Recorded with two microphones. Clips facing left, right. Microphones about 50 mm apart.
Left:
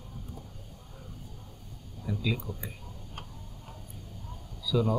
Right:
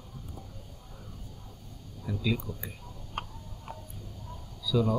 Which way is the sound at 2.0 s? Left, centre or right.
Centre.